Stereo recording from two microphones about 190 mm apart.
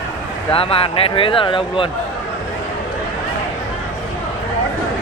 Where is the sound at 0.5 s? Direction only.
30° left (ahead or behind).